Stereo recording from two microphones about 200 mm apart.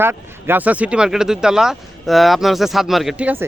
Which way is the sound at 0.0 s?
10° right (ahead or behind).